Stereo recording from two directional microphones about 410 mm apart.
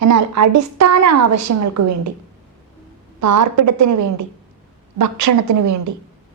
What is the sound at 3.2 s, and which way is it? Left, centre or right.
A woman's voice, right.